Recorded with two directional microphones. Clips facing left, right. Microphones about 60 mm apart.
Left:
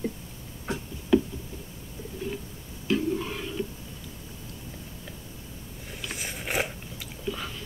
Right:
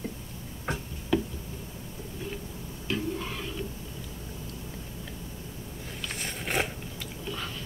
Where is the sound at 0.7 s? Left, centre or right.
Right.